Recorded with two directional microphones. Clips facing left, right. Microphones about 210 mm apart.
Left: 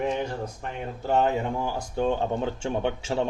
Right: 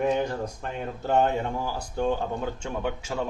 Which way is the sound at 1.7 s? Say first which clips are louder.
Even; 25° left (ahead or behind).